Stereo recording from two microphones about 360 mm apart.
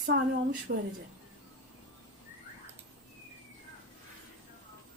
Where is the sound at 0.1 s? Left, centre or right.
Right.